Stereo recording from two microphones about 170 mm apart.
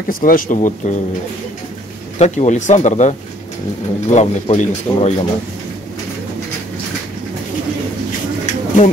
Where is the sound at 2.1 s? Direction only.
40° left (ahead or behind).